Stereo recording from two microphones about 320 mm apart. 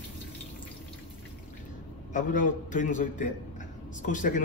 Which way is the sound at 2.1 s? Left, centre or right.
Left.